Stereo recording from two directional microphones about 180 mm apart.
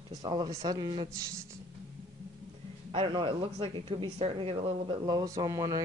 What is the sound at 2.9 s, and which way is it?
Speech, 30° right (ahead or behind).